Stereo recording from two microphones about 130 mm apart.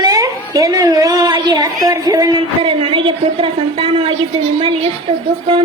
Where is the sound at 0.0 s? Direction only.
25° right (ahead or behind).